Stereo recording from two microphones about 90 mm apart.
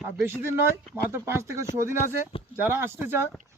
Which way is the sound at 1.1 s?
30° right (ahead or behind).